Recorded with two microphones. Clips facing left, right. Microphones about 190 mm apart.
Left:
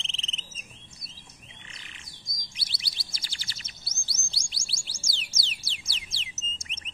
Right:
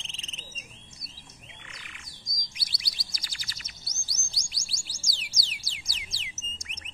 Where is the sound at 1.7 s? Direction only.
30° left (ahead or behind).